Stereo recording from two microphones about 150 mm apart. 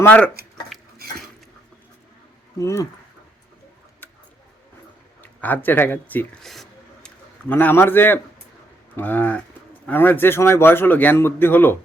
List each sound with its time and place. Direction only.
0.0 s a man's voice: 10° left (ahead or behind)
0.7 s dishes: centre (ahead or behind)
2.6 s speech: 20° left (ahead or behind)
4.0 s a sound: 15° left (ahead or behind)
5.2 s a sound: 10° left (ahead or behind)
7.4 s a man's voice: 15° left (ahead or behind)